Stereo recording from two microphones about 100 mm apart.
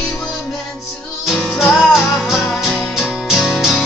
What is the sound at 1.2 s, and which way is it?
Music, centre (ahead or behind).